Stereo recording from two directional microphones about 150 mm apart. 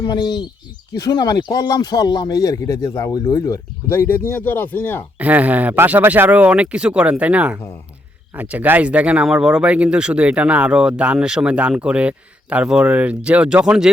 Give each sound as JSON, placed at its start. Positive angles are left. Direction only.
{"t": 0.0, "sound": "speech", "side_deg": 30}
{"t": 5.2, "sound": "speech", "side_deg": -10}